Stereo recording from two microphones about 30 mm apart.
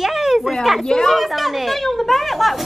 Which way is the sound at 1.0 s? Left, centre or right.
Centre.